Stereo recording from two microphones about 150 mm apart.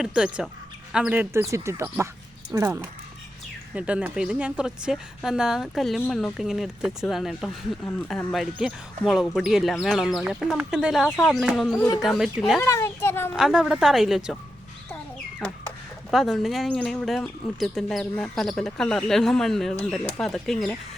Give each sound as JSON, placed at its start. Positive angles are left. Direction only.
{"t": 0.0, "sound": "speech", "side_deg": -5}
{"t": 3.8, "sound": "speech", "side_deg": -10}
{"t": 7.9, "sound": "speech", "side_deg": 10}
{"t": 12.5, "sound": "a child's voice", "side_deg": 20}
{"t": 13.3, "sound": "speech", "side_deg": -5}
{"t": 16.1, "sound": "speech", "side_deg": 0}